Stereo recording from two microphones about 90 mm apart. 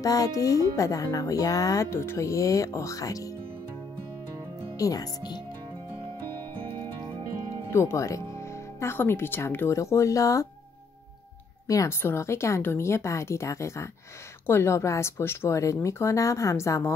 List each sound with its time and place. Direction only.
0.0 s speech: 40° left (ahead or behind)
4.7 s speech: 40° left (ahead or behind)
7.7 s speech: 30° left (ahead or behind)
11.6 s a woman's voice: 40° left (ahead or behind)